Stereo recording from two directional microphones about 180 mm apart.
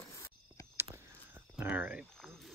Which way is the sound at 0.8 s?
15° right (ahead or behind).